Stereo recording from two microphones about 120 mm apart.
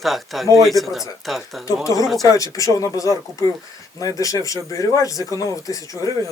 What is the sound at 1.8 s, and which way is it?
Speech, 30° left (ahead or behind).